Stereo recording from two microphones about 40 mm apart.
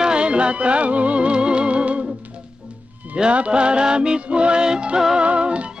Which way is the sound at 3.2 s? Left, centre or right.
Right.